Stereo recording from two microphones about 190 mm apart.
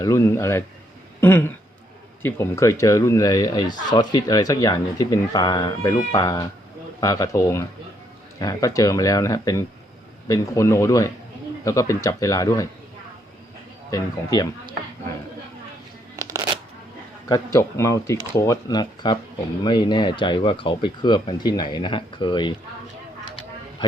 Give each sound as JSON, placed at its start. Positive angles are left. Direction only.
{"t": 0.0, "sound": "speech", "side_deg": 15}
{"t": 1.2, "sound": "a sound", "side_deg": 10}
{"t": 2.2, "sound": "speech", "side_deg": 15}
{"t": 13.9, "sound": "speech", "side_deg": 20}
{"t": 16.1, "sound": "shuffling cards", "side_deg": -15}
{"t": 17.2, "sound": "speech", "side_deg": 20}